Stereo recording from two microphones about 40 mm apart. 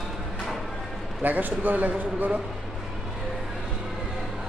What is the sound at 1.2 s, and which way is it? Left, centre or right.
A man's voice, right.